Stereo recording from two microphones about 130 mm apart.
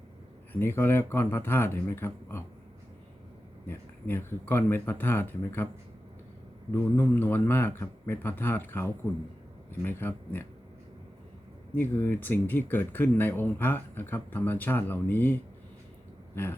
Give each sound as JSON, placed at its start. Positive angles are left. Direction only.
{"t": 0.5, "sound": "speech", "side_deg": 15}
{"t": 3.7, "sound": "speech", "side_deg": 20}
{"t": 6.7, "sound": "speech", "side_deg": 15}
{"t": 11.7, "sound": "speech", "side_deg": 15}